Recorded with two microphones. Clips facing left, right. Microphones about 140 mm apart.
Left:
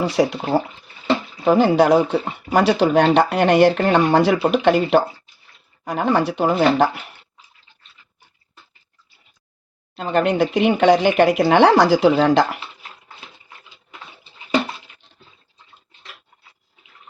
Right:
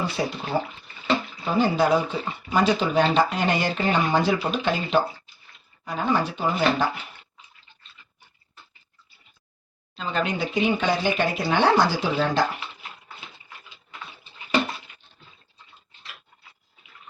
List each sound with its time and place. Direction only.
0.0 s speech: 90° left
1.5 s speech: 75° left (ahead or behind)
9.9 s speech: 65° left (ahead or behind); by 12.5 s 80° left